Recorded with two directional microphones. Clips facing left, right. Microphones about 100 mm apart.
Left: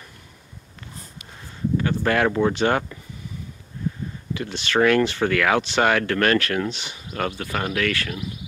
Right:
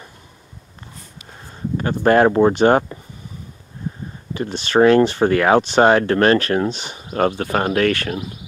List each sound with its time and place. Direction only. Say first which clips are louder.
1.8 s speech: right 8 dB; 35° right (ahead or behind)
4.3 s speech: right 5 dB; 40° right (ahead or behind)